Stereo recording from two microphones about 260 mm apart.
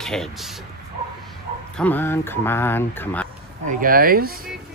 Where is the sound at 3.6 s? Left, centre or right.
Right.